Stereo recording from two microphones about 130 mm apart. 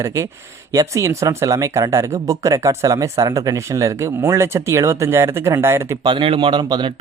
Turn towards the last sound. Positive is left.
turn(degrees=-35)  # may be behind; listen again after turning